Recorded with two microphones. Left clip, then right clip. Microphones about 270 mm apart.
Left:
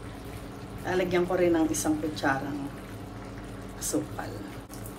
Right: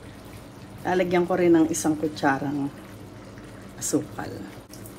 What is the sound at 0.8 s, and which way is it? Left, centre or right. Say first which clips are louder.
Speech: right 4 dB; right.